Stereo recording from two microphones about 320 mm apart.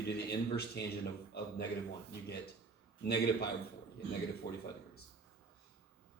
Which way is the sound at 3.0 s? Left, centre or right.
Left.